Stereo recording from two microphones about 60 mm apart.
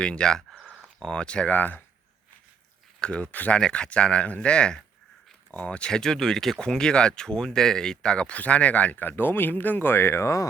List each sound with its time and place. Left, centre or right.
0.0 s speech: centre
0.6 s a sound: centre
0.9 s speech: centre
1.5 s speech: left
3.0 s speech: centre
5.9 s speech: centre; by 10.5 s left